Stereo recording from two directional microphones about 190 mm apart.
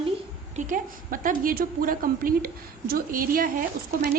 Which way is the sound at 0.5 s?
45° right (ahead or behind).